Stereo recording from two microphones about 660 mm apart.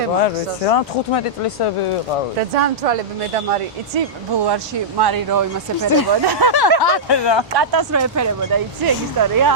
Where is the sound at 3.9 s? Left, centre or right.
Right.